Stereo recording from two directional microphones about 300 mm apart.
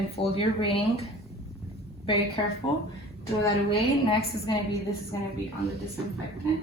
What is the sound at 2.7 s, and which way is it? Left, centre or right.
Speech, centre.